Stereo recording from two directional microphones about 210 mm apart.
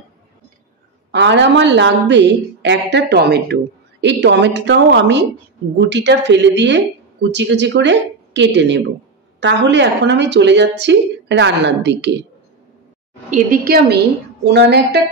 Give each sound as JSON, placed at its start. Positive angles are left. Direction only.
{"t": 1.1, "sound": "speech", "side_deg": -55}
{"t": 13.3, "sound": "a woman's voice", "side_deg": -45}